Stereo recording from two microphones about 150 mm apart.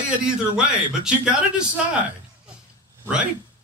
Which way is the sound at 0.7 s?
5° right (ahead or behind).